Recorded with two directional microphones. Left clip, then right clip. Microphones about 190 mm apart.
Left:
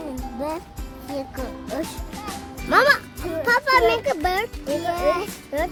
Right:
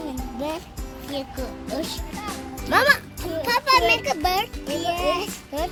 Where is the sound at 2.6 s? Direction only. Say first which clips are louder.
Left 2 dB; 35° left (ahead or behind).